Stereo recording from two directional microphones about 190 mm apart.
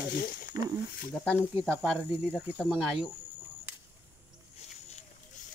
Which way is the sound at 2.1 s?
10° right (ahead or behind).